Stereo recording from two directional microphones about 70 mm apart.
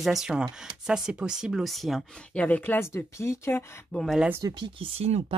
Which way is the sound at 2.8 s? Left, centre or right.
Left.